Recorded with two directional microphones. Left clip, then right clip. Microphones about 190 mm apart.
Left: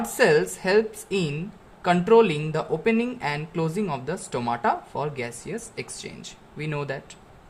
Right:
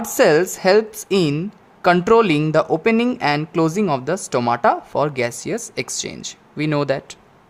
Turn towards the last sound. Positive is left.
turn(degrees=-35)  # may be behind; listen again after turning